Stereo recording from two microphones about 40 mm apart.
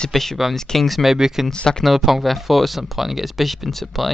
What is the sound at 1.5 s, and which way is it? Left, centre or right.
Speech, left.